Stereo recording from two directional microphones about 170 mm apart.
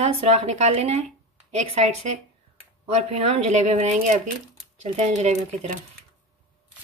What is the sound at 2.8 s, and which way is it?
Speech, 40° right (ahead or behind).